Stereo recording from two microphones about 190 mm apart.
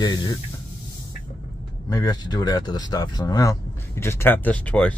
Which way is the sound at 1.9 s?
20° left (ahead or behind).